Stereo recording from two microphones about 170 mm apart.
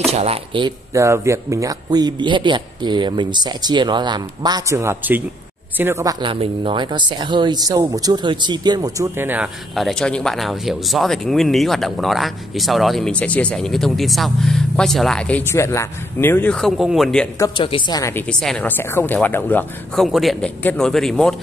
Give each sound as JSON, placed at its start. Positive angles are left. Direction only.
{"t": 0.1, "sound": "speech", "side_deg": -35}
{"t": 0.9, "sound": "a man's voice", "side_deg": -15}
{"t": 9.8, "sound": "speech", "side_deg": 5}
{"t": 17.6, "sound": "a woman's voice", "side_deg": 30}
{"t": 18.2, "sound": "speech", "side_deg": 5}